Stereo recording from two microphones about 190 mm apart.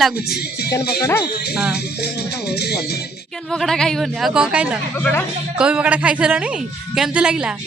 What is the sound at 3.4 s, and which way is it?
Speech, centre (ahead or behind).